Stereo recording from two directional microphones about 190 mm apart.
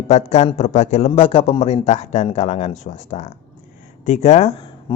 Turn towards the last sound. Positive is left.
turn(degrees=30)  # may be behind; listen again after turning